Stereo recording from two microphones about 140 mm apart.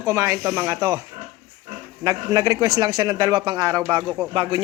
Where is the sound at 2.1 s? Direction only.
25° right (ahead or behind).